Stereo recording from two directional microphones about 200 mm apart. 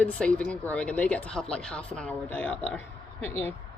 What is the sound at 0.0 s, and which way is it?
A woman's voice, 5° left (ahead or behind).